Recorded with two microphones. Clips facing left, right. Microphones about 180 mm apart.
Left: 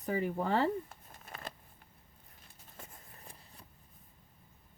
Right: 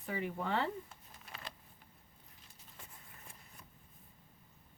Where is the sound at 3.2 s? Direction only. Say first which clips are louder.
Left 3 dB; 35° left (ahead or behind).